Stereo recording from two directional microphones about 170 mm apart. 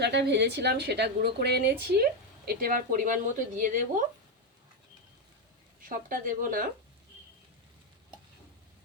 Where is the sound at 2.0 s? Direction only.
60° right (ahead or behind).